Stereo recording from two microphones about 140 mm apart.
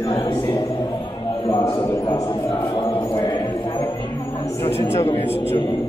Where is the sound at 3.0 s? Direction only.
30° left (ahead or behind).